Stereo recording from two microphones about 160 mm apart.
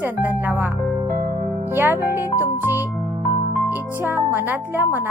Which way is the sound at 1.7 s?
15° right (ahead or behind).